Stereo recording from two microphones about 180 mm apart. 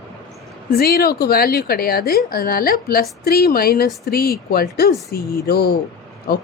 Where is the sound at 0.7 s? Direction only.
60° left (ahead or behind).